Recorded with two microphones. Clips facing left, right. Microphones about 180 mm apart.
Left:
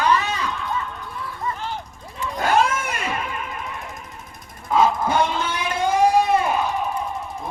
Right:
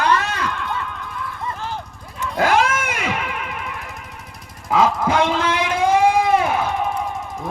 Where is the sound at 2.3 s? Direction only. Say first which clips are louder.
Right 2 dB; 90° right.